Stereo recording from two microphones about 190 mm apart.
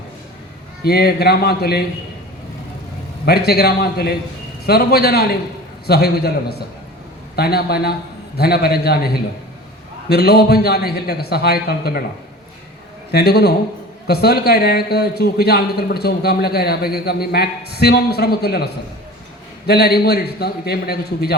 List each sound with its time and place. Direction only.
0.9 s a man's voice: 55° left (ahead or behind)
3.2 s a man's voice: 55° left (ahead or behind)
13.1 s a man's voice: 55° left (ahead or behind)